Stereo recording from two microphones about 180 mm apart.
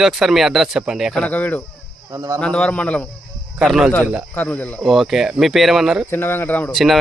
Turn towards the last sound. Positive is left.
turn(degrees=0)  # may be behind; listen again after turning